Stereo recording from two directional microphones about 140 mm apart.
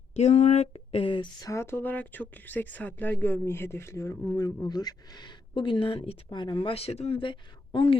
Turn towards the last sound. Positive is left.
turn(degrees=35)  # may be behind; listen again after turning